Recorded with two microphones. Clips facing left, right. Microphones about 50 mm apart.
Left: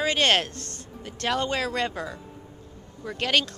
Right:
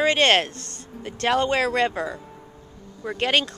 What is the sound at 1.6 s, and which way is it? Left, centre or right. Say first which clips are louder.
Speech: right 6 dB; right.